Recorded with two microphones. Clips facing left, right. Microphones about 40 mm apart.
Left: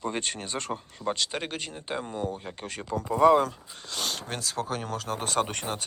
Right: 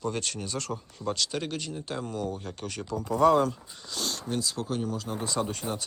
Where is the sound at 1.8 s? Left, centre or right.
Left.